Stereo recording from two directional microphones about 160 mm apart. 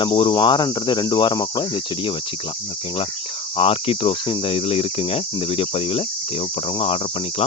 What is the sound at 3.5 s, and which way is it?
Cricket, 35° left (ahead or behind).